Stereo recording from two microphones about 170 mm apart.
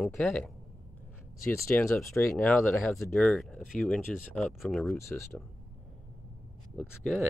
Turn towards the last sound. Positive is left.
turn(degrees=5)  # may be behind; listen again after turning